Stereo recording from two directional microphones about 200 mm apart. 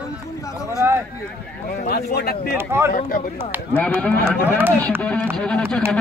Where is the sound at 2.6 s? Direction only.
10° right (ahead or behind).